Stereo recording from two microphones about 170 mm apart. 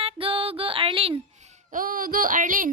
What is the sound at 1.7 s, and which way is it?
Speech, 55° right (ahead or behind).